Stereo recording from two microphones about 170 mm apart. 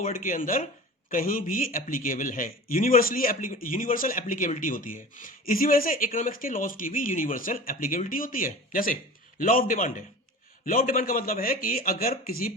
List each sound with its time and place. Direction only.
0.0 s a man's voice: 50° left (ahead or behind)